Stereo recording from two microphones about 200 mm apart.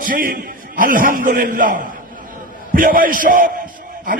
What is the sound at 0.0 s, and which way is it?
A man's voice, 45° right (ahead or behind).